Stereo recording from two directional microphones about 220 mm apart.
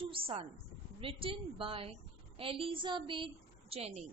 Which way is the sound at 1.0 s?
25° right (ahead or behind).